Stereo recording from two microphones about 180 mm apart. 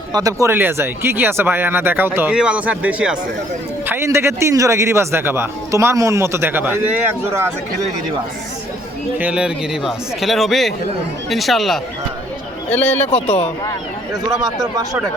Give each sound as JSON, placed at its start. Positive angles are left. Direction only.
{"t": 0.1, "sound": "a man's voice", "side_deg": -20}
{"t": 9.1, "sound": "a man's voice", "side_deg": -5}
{"t": 13.1, "sound": "speech", "side_deg": 35}
{"t": 14.4, "sound": "speech", "side_deg": -20}